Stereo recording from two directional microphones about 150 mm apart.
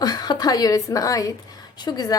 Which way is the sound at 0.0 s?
25° left (ahead or behind).